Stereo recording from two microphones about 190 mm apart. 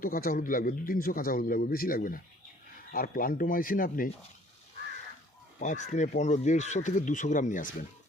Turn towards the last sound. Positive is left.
turn(degrees=45)  # may be behind; listen again after turning